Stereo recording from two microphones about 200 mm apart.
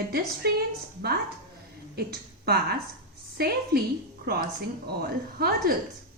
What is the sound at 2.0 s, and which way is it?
A woman's voice, 50° right (ahead or behind).